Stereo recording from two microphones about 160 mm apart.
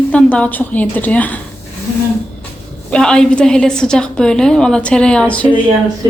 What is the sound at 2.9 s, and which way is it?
A woman's voice, 5° left (ahead or behind).